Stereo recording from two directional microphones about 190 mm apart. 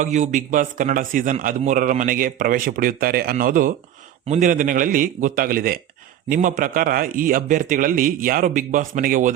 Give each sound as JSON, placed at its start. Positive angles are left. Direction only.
{"t": 0.0, "sound": "a man's voice", "side_deg": -40}